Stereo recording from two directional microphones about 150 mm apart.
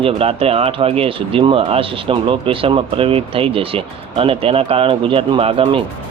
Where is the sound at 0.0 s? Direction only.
40° right (ahead or behind).